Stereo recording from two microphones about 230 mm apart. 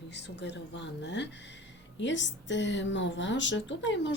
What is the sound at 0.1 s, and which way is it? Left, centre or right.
A woman's voice, left.